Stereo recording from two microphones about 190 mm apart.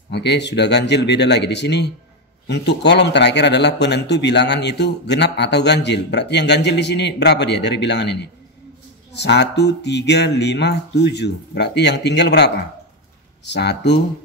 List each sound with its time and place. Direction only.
0.1 s speech: 65° left (ahead or behind)